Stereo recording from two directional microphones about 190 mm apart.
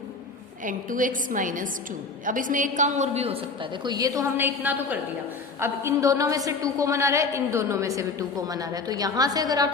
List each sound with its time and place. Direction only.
0.6 s a woman's voice: 45° right (ahead or behind); by 9.6 s 20° right (ahead or behind)